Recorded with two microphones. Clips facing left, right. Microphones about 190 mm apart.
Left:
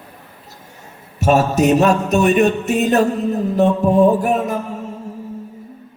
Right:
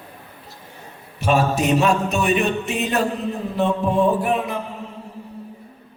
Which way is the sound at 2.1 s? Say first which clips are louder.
Left 6 dB; 40° left (ahead or behind).